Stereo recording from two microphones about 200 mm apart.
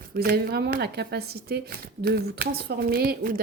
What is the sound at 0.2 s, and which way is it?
Speech, 50° right (ahead or behind).